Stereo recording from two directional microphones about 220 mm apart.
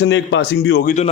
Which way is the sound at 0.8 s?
35° left (ahead or behind).